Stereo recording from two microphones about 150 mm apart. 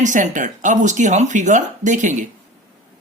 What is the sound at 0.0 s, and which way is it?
Speech, 55° right (ahead or behind).